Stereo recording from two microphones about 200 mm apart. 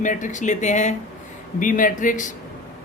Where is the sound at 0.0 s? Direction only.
40° left (ahead or behind).